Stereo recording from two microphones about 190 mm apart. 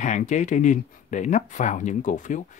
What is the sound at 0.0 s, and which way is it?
Speech, 40° left (ahead or behind).